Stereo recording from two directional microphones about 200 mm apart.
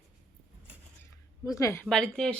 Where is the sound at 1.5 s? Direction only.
15° left (ahead or behind).